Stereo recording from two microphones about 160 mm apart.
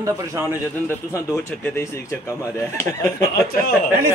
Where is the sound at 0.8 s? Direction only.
15° left (ahead or behind).